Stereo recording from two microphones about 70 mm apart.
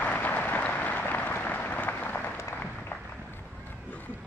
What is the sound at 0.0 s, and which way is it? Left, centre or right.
Applause, left.